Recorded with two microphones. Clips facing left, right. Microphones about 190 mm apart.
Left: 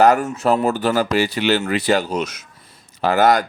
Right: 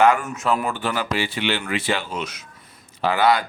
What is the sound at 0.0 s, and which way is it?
Speech, 40° left (ahead or behind).